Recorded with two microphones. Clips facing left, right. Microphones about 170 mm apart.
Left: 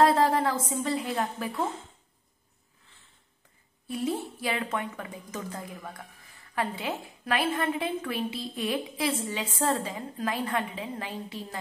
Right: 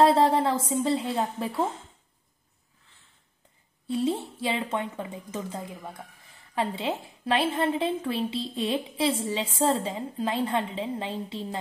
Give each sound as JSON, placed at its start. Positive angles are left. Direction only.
{"t": 0.0, "sound": "a woman's voice", "side_deg": -25}
{"t": 3.8, "sound": "a woman's voice", "side_deg": -25}